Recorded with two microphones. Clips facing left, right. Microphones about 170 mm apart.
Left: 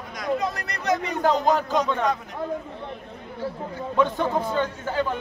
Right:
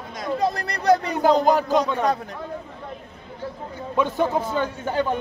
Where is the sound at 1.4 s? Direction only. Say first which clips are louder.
Right 3 dB; 10° right (ahead or behind).